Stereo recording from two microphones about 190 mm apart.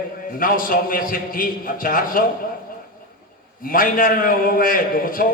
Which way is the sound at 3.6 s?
50° left (ahead or behind).